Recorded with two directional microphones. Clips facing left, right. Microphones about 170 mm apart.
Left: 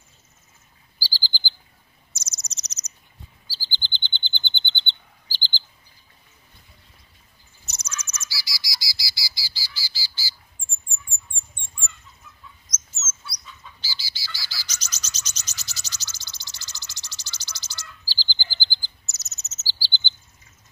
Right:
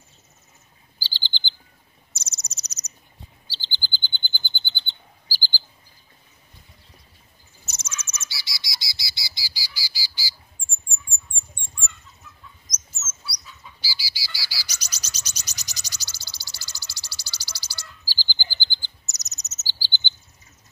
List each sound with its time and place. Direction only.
0.9 s chirp: 25° right (ahead or behind)
2.1 s cricket: 30° right (ahead or behind)
2.4 s owl: 10° right (ahead or behind)
3.8 s frog: 5° right (ahead or behind)
4.4 s chirp: 5° right (ahead or behind)
7.8 s bird: 25° right (ahead or behind)
12.6 s bird: 10° right (ahead or behind)